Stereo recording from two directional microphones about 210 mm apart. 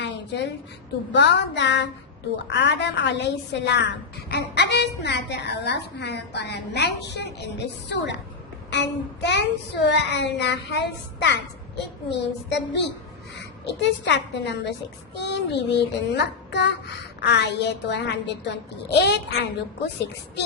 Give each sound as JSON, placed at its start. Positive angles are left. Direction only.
{"t": 0.0, "sound": "a sound", "side_deg": 55}
{"t": 1.1, "sound": "a woman's voice", "side_deg": 55}
{"t": 15.2, "sound": "child singing", "side_deg": 55}
{"t": 17.2, "sound": "a woman's voice", "side_deg": 55}